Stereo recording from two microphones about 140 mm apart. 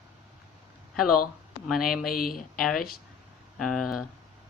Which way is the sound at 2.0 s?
90° left.